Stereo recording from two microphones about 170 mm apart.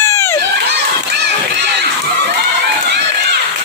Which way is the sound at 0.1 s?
15° left (ahead or behind).